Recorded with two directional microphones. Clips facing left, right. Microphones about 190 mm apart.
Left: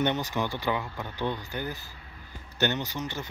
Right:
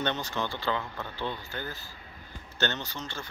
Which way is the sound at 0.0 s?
15° left (ahead or behind).